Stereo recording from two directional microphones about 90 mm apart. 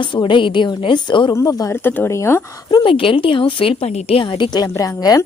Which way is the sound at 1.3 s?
30° left (ahead or behind).